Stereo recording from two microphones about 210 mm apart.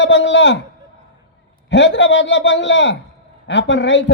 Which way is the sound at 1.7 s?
60° left (ahead or behind).